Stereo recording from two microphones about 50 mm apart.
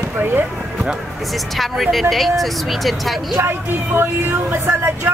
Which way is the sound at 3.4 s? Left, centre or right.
Right.